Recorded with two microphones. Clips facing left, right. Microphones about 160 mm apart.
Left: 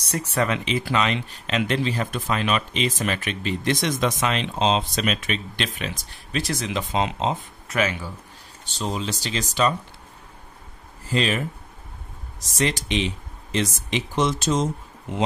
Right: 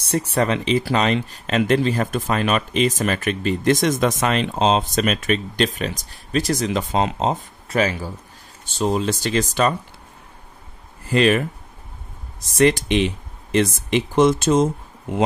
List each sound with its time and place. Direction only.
0.0 s speech: 30° right (ahead or behind)
8.7 s speech: 50° right (ahead or behind)
11.1 s speech: 60° right (ahead or behind)